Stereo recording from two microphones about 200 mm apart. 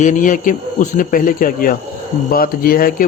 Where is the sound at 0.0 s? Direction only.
40° left (ahead or behind).